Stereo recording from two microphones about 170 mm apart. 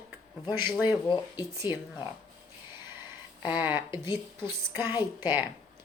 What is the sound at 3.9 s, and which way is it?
Speech, 25° left (ahead or behind).